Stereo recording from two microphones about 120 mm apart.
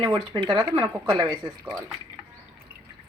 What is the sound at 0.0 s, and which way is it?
Speech, 40° right (ahead or behind).